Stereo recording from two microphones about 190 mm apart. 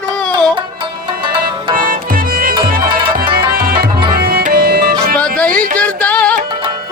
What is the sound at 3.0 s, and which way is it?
Music, 25° right (ahead or behind).